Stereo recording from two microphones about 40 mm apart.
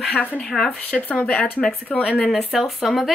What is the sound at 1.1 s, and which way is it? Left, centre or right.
Speech, left.